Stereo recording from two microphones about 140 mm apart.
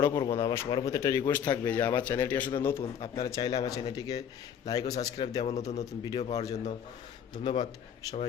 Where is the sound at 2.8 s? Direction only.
35° left (ahead or behind).